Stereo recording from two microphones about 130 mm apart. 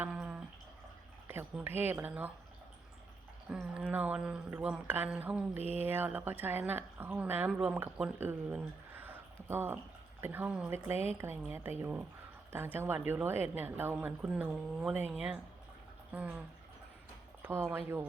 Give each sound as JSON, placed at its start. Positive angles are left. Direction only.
{"t": 0.0, "sound": "a sound", "side_deg": -5}
{"t": 1.3, "sound": "a woman's voice", "side_deg": -15}
{"t": 3.5, "sound": "a woman's voice", "side_deg": -5}
{"t": 10.9, "sound": "speech", "side_deg": 50}
{"t": 11.2, "sound": "a woman's voice", "side_deg": -20}
{"t": 17.4, "sound": "a woman's voice", "side_deg": -20}